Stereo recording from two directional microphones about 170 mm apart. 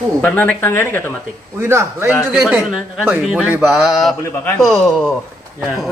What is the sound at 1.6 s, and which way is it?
Speech, 15° right (ahead or behind).